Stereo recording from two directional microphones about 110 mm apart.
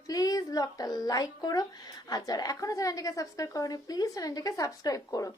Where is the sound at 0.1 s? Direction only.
35° left (ahead or behind).